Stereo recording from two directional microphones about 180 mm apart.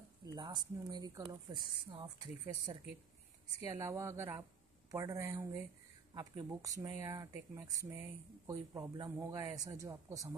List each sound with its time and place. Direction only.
0.4 s speech: 25° right (ahead or behind)
3.6 s speech: 15° right (ahead or behind)